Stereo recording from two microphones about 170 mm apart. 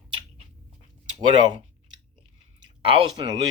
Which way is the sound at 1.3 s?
25° right (ahead or behind).